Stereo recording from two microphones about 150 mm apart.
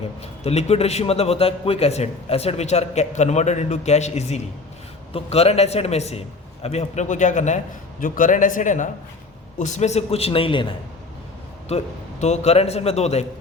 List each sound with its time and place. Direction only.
0.2 s a man's voice: 45° left (ahead or behind)
11.7 s a man's voice: 45° left (ahead or behind)